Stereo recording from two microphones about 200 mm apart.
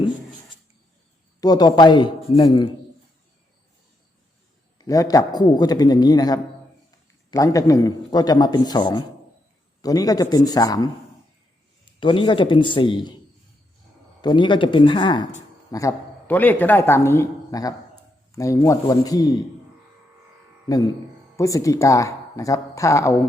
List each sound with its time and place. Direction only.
1.4 s a man's voice: 20° left (ahead or behind)
4.8 s a man's voice: 20° left (ahead or behind)
11.9 s a man's voice: 25° left (ahead or behind)
14.2 s a man's voice: 20° left (ahead or behind)
20.7 s a man's voice: 20° left (ahead or behind)